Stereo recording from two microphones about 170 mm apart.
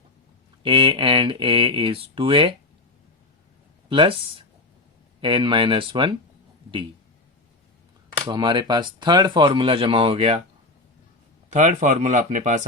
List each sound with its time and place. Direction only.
0.6 s speech: 30° right (ahead or behind)
3.8 s speech: 30° right (ahead or behind)
8.3 s speech: 25° right (ahead or behind)
11.5 s speech: 45° right (ahead or behind)